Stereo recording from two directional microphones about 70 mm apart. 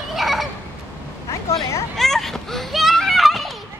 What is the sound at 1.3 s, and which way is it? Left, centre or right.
Vehicle, left.